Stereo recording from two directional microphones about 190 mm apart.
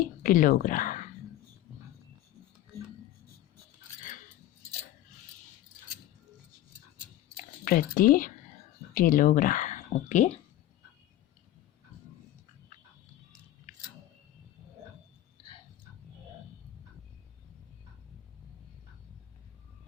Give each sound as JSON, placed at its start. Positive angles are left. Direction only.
{"t": 0.0, "sound": "speech", "side_deg": 50}
{"t": 7.3, "sound": "a sound", "side_deg": 50}
{"t": 9.0, "sound": "speech", "side_deg": 45}